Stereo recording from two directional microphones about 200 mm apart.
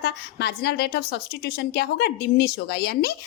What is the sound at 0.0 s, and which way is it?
A woman's voice, 55° left (ahead or behind).